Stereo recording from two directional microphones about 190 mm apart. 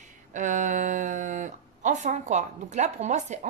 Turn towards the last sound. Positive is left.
turn(degrees=-40)  # may be behind; listen again after turning